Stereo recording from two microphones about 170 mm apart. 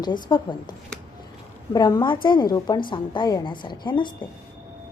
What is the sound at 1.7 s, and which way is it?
A woman's voice, 25° left (ahead or behind).